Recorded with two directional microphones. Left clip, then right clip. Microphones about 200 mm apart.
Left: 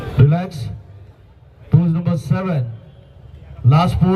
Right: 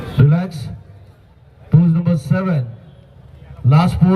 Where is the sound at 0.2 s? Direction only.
30° left (ahead or behind).